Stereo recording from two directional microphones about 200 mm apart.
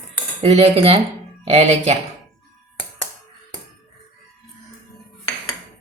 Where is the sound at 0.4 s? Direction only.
30° right (ahead or behind).